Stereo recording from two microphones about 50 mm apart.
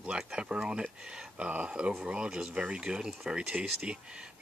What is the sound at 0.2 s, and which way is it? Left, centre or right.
Speech, centre.